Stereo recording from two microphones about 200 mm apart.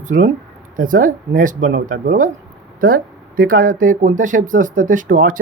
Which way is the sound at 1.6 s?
60° right (ahead or behind).